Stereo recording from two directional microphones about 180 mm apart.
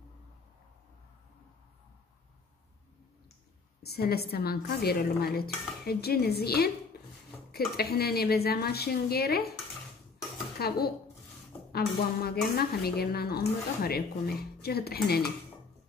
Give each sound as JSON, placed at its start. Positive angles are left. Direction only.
{"t": 3.8, "sound": "a woman's voice", "side_deg": 60}
{"t": 10.6, "sound": "a woman's voice", "side_deg": 60}